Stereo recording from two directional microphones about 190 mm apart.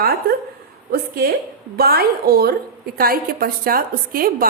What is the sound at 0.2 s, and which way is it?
Speech, 55° right (ahead or behind).